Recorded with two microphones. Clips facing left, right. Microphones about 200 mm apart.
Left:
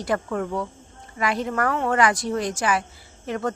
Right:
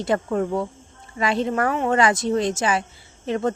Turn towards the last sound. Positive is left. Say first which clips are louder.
# right 4 dB
turn(degrees=-25)  # may be behind; listen again after turning